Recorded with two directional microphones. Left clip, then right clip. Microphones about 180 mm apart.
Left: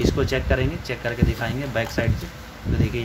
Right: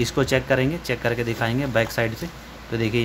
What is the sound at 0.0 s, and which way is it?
Speech, 30° right (ahead or behind).